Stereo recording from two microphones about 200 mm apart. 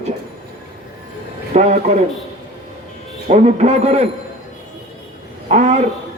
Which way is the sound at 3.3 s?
35° right (ahead or behind).